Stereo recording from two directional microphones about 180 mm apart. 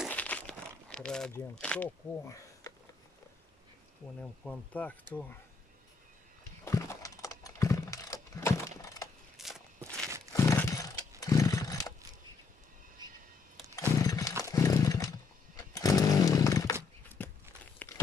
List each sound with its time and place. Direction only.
0.1 s crumpling: 10° left (ahead or behind)
1.3 s speech: 5° left (ahead or behind)
4.2 s speech: 10° left (ahead or behind)
6.6 s a sound: 15° left (ahead or behind)
9.4 s walk: centre (ahead or behind)
10.3 s wild animals: 15° left (ahead or behind)
13.7 s chainsaw: 20° left (ahead or behind)
17.2 s walk: 10° left (ahead or behind)